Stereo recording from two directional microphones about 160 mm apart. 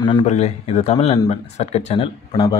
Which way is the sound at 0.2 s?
45° left (ahead or behind).